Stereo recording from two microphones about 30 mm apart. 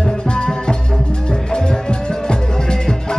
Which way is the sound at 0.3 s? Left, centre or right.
Left.